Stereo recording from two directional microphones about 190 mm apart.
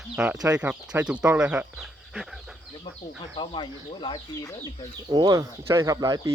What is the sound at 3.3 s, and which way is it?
Speech, 30° left (ahead or behind).